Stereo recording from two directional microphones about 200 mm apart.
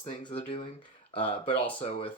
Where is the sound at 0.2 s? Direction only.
25° left (ahead or behind).